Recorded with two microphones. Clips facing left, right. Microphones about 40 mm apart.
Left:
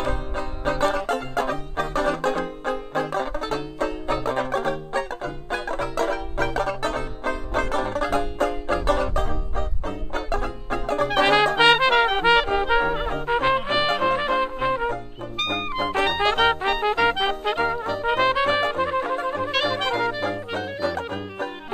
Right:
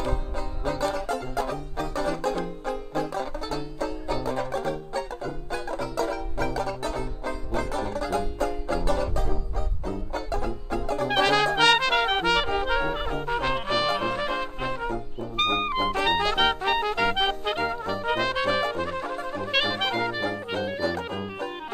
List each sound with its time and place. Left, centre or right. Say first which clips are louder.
0.0 s music: left 3 dB; left
11.1 s trumpet: left 3 dB; left
12.4 s music: left 4 dB; centre
15.3 s brass instrument: right 2 dB; centre
15.8 s music: left 3 dB; left
16.3 s trumpet: left 3 dB; centre
17.1 s music: left 2 dB; centre
18.1 s trumpet: left 5 dB; left
19.5 s brass instrument: even; centre